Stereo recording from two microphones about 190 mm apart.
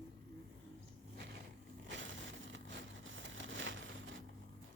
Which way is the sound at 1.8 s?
75° right (ahead or behind).